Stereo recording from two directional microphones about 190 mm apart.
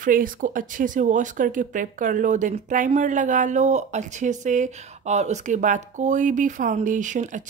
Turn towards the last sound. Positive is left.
turn(degrees=-40)  # may be behind; listen again after turning